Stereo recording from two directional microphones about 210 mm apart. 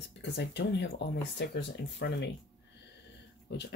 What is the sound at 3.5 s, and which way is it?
Speech, 55° left (ahead or behind).